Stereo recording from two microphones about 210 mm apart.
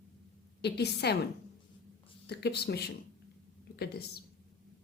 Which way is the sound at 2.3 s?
50° left (ahead or behind).